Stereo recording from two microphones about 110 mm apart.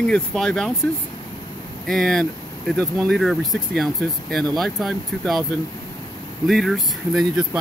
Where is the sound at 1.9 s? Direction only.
5° left (ahead or behind).